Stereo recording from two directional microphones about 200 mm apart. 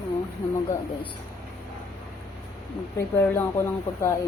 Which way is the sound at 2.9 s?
15° left (ahead or behind).